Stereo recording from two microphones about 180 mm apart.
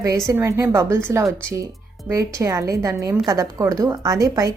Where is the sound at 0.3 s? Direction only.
15° right (ahead or behind).